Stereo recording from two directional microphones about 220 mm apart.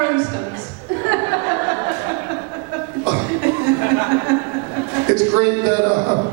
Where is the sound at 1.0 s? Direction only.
15° right (ahead or behind).